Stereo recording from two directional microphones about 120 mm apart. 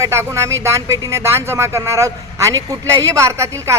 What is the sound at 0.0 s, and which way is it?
A man's voice, 25° right (ahead or behind).